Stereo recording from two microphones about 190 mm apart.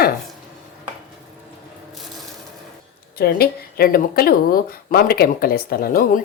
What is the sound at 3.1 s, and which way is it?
Speech, 55° left (ahead or behind).